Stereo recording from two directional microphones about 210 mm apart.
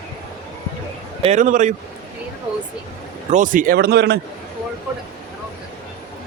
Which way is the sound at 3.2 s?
35° right (ahead or behind).